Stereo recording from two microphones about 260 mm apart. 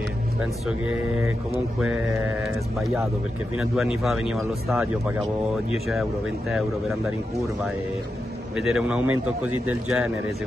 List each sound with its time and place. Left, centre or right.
1.8 s speech: centre
8.5 s speech: centre
9.0 s a man's voice: right
9.7 s speech: centre